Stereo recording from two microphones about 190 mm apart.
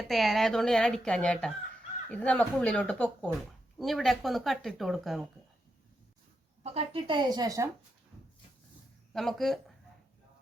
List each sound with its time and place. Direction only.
0.0 s speech: centre (ahead or behind)
6.6 s a woman's voice: 30° right (ahead or behind)
9.1 s speech: centre (ahead or behind)